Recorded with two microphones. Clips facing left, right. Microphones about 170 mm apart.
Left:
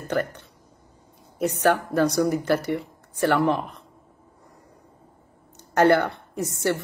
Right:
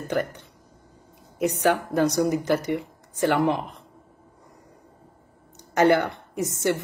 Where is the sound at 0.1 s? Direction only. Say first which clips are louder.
Left 1 dB; 15° right (ahead or behind).